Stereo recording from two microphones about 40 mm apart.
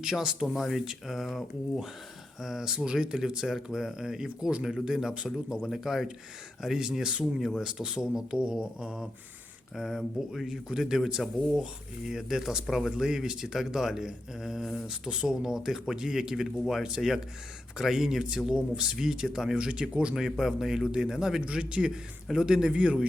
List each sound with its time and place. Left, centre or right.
0.0 s speech: centre
3.4 s speech: centre
5.1 s a man's voice: right
5.6 s a man's voice: centre
9.7 s speech: centre
14.8 s speech: right
19.5 s a man's voice: right
20.1 s speech: centre
21.6 s a man's voice: right
21.8 s a man's voice: centre